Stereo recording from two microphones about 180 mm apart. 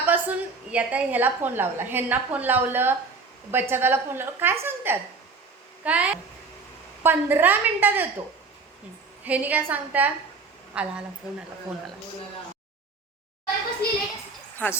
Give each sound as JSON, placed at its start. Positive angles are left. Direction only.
{"t": 0.0, "sound": "a woman's voice", "side_deg": -10}
{"t": 9.2, "sound": "a woman's voice", "side_deg": -10}
{"t": 13.8, "sound": "a sound", "side_deg": 60}